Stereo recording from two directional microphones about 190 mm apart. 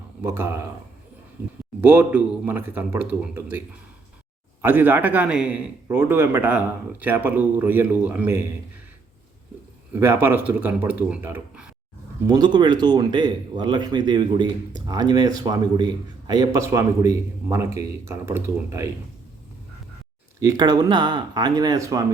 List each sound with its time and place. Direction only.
0.2 s speech: 15° right (ahead or behind)
1.8 s speech: 10° right (ahead or behind)
4.6 s speech: 10° right (ahead or behind)
9.9 s speech: 10° right (ahead or behind)
12.3 s speech: 20° right (ahead or behind)
20.4 s speech: 20° right (ahead or behind)